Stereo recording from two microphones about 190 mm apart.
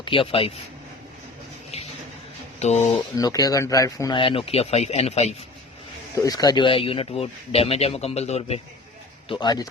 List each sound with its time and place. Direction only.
0.0 s speech: 30° left (ahead or behind)
1.7 s a sound: 35° left (ahead or behind)
2.6 s speech: 35° left (ahead or behind)
3.2 s speech: 20° left (ahead or behind); by 5.3 s 35° left (ahead or behind)
6.1 s speech: 20° left (ahead or behind)
9.3 s speech: 20° left (ahead or behind)